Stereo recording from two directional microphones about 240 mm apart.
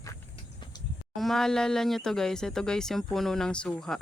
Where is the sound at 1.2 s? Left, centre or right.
Centre.